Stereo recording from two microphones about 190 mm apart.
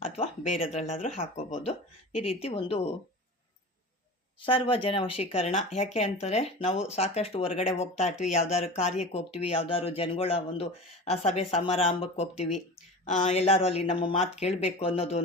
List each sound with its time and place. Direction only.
0.0 s speech: 30° left (ahead or behind)
4.4 s speech: 25° left (ahead or behind)